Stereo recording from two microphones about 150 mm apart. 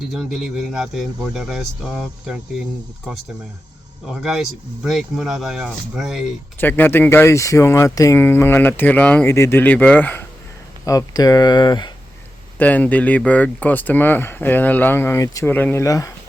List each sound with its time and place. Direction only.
0.1 s speech: centre (ahead or behind)
4.0 s speech: 5° right (ahead or behind)
6.6 s speech: 15° left (ahead or behind)
10.8 s speech: 25° left (ahead or behind)
12.5 s speech: 10° left (ahead or behind)